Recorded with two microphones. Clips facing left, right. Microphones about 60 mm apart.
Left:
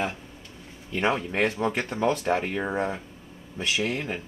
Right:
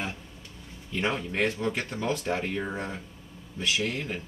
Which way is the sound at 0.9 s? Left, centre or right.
Centre.